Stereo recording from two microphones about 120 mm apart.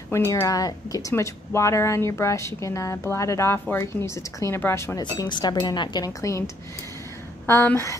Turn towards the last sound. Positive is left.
turn(degrees=20)  # may be behind; listen again after turning